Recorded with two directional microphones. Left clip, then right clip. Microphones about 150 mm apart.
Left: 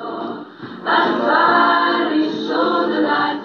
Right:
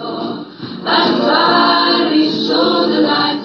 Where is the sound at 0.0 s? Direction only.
35° right (ahead or behind).